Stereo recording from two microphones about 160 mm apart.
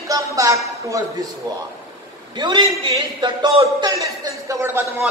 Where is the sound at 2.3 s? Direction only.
30° right (ahead or behind).